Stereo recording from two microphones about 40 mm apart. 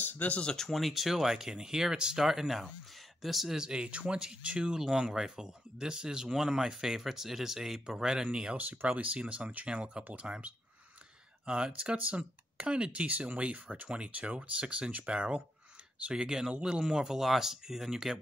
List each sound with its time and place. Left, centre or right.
0.0 s a sound: left
0.3 s speech: left
0.6 s speech: centre
2.2 s speech: centre
3.5 s speech: centre
8.9 s speech: right
14.9 s speech: right
15.1 s speech: right; by 18.2 s centre